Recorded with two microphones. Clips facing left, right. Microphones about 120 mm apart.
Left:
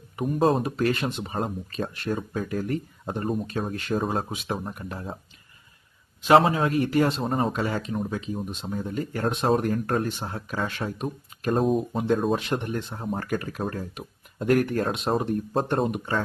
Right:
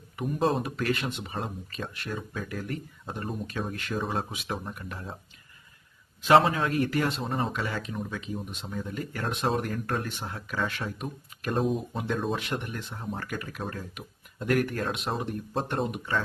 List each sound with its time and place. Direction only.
0.2 s speech: 40° left (ahead or behind)
4.4 s speech: 30° left (ahead or behind)
6.3 s speech: 30° left (ahead or behind)
7.5 s speech: 30° left (ahead or behind)